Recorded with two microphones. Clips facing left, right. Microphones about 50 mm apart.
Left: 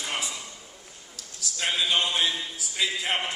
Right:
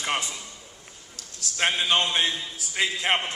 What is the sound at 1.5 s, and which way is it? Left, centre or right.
A man's voice, right.